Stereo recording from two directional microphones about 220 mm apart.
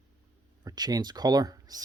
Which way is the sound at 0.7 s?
15° right (ahead or behind).